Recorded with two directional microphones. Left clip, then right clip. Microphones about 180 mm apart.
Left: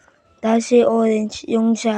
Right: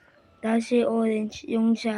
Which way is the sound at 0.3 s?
35° left (ahead or behind).